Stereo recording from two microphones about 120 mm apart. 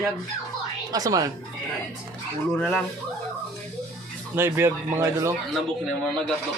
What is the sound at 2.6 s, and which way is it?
Speech, 10° left (ahead or behind).